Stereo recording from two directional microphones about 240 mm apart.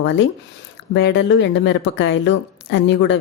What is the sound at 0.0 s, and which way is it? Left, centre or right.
A woman's voice, left.